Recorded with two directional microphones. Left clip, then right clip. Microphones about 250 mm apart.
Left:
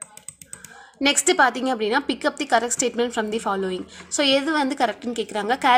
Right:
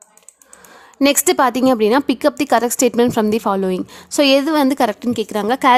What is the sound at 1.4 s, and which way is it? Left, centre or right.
A woman's voice, right.